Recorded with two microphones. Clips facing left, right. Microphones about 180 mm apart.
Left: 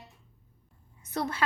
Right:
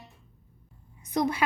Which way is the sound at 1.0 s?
15° right (ahead or behind).